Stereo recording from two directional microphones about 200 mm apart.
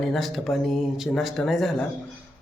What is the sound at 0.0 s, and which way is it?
Speech, centre (ahead or behind).